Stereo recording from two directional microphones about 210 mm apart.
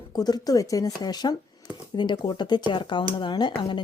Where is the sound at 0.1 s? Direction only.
20° left (ahead or behind).